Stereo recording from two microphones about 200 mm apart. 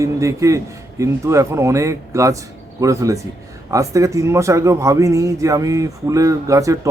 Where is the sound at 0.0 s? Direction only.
15° right (ahead or behind).